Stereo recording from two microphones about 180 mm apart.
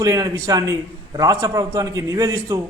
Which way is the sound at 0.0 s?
20° right (ahead or behind).